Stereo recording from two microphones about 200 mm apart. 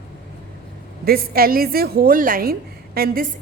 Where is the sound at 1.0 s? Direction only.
50° right (ahead or behind).